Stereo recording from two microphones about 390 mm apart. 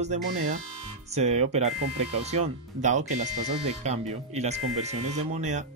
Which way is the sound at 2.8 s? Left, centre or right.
Centre.